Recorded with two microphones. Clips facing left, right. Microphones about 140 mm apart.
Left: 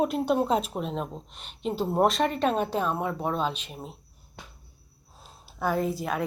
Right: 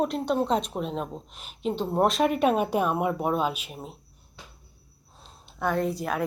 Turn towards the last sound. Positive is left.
turn(degrees=0)  # may be behind; listen again after turning